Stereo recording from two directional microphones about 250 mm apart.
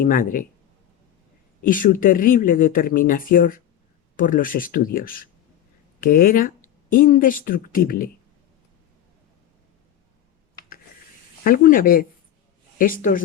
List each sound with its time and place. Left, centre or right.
0.0 s speech: left
1.6 s speech: left
11.4 s speech: left